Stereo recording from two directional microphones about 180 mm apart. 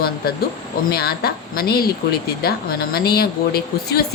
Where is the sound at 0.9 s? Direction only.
60° left (ahead or behind).